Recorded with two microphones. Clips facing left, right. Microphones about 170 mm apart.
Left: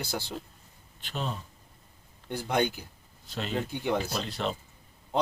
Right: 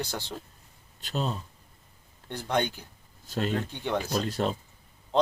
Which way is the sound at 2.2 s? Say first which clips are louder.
Left 1 dB; 10° left (ahead or behind).